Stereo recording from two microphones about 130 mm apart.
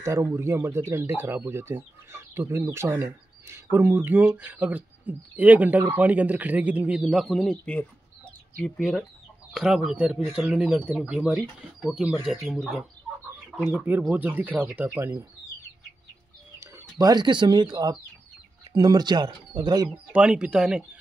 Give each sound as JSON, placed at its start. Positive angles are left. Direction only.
{"t": 0.0, "sound": "speech", "side_deg": -20}
{"t": 16.5, "sound": "speech", "side_deg": -30}
{"t": 20.1, "sound": "speech", "side_deg": -10}